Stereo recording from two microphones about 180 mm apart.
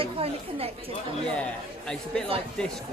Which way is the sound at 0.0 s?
35° right (ahead or behind).